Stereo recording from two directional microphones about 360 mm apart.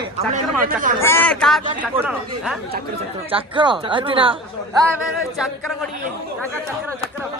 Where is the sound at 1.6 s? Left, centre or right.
Centre.